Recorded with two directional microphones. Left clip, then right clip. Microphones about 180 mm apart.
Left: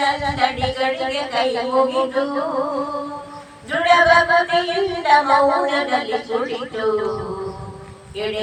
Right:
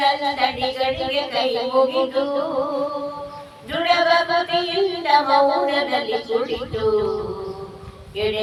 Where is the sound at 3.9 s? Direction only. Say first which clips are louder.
Left 4 dB; 25° right (ahead or behind).